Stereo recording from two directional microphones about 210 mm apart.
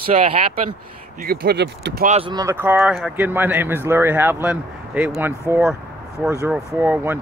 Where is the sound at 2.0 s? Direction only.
30° right (ahead or behind).